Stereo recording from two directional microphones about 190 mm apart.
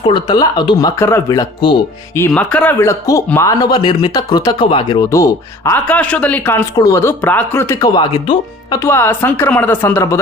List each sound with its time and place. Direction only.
0.0 s speech: 25° left (ahead or behind)
2.1 s speech: 10° left (ahead or behind)